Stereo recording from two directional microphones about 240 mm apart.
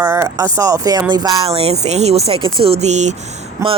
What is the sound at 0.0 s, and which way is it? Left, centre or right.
Speech, centre.